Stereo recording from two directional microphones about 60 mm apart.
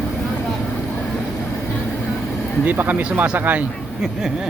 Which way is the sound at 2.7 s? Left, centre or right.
Right.